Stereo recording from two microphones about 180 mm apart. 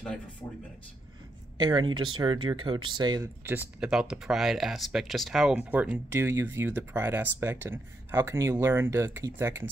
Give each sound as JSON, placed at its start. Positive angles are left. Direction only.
{"t": 1.6, "sound": "speech", "side_deg": -25}
{"t": 3.4, "sound": "speech", "side_deg": -10}